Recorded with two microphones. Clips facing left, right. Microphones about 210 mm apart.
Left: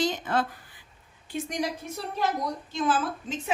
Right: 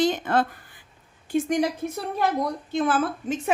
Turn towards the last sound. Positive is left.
turn(degrees=-60)  # may be behind; listen again after turning